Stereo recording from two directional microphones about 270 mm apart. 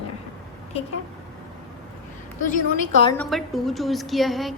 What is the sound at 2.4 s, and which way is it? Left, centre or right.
Speech, left.